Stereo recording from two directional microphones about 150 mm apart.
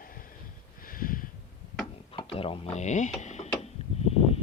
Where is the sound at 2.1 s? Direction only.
40° left (ahead or behind).